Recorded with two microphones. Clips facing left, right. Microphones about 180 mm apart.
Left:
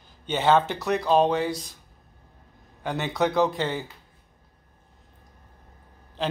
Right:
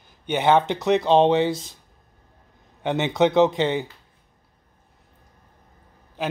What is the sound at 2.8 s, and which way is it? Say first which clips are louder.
Speech: right 5 dB; 20° right (ahead or behind).